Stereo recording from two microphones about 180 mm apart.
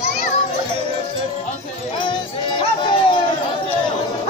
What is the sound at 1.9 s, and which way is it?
Music, 25° left (ahead or behind).